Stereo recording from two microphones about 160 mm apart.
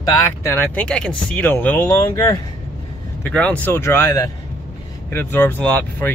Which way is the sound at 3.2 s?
10° left (ahead or behind).